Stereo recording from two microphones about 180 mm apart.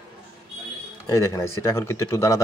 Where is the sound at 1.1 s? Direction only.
15° left (ahead or behind).